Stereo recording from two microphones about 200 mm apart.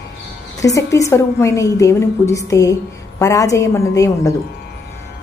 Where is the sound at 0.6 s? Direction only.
15° left (ahead or behind).